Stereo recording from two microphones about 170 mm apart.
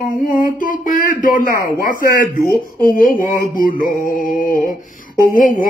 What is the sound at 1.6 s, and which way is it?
Speech, 55° left (ahead or behind).